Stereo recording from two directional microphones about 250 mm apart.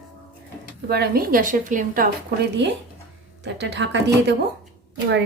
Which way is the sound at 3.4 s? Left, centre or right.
Right.